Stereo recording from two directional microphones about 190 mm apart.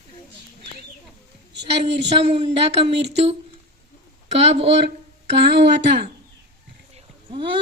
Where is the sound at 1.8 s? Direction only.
30° right (ahead or behind).